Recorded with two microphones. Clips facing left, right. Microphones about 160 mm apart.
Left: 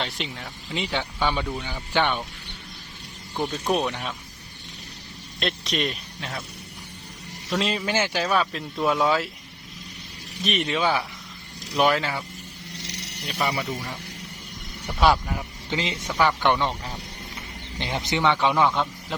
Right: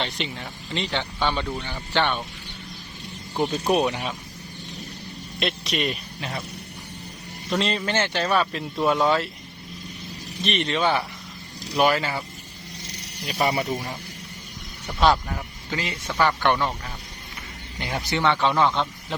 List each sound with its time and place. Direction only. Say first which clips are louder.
0.0 s speech: right 2 dB; centre (ahead or behind)
3.3 s speech: right 3 dB; 10° right (ahead or behind)
5.4 s a man's voice: even; centre (ahead or behind)
7.6 s speech: even; 5° left (ahead or behind)
10.4 s speech: right 1 dB; 5° left (ahead or behind)
12.9 s a sound: left 1 dB; 70° left (ahead or behind)
14.8 s speech: even; 10° left (ahead or behind)
15.7 s speech: left 1 dB; 20° left (ahead or behind)
17.7 s speech: even; 20° left (ahead or behind)